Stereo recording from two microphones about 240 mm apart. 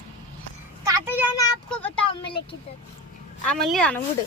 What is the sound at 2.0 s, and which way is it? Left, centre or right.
Speech, left.